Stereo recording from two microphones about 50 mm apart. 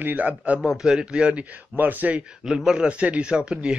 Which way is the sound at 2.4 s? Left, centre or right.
Centre.